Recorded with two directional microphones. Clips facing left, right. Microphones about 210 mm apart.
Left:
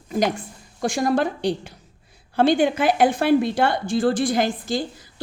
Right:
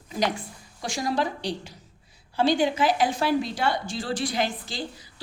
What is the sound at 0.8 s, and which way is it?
A woman's voice, 55° left (ahead or behind).